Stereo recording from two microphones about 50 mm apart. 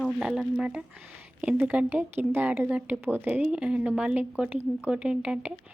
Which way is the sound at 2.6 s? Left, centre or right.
Right.